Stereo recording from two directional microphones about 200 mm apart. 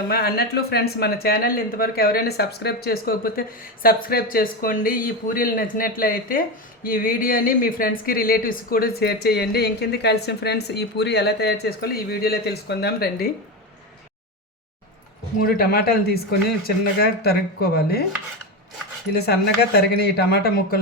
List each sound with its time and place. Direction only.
0.1 s speech: 50° left (ahead or behind)
15.4 s speech: 50° left (ahead or behind)
19.1 s speech: 55° left (ahead or behind)